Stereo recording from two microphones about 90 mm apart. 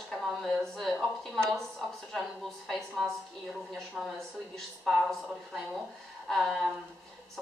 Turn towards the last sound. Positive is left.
turn(degrees=5)  # may be behind; listen again after turning